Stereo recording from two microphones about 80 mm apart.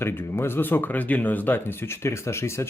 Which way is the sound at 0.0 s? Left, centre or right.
Left.